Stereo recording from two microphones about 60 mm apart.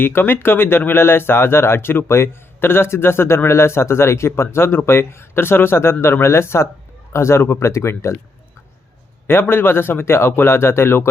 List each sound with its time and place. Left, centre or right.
0.0 s speech: left
9.2 s speech: left